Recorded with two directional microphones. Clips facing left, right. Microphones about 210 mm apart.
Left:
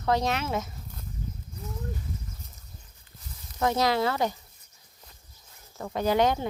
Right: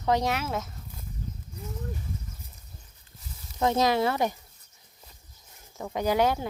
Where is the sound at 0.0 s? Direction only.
15° right (ahead or behind).